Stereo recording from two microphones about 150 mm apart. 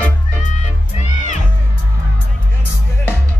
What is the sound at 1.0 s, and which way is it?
Music, 55° left (ahead or behind).